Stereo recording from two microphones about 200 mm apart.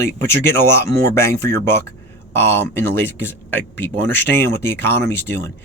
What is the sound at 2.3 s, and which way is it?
Speech, 10° left (ahead or behind).